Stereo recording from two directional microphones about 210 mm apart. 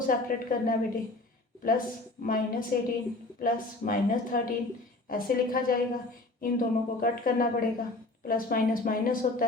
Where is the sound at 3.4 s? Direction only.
40° left (ahead or behind).